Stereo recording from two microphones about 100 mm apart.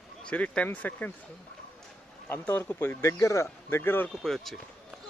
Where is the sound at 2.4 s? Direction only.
20° left (ahead or behind).